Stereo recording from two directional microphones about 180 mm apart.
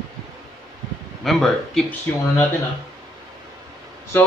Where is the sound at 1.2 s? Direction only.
Centre (ahead or behind).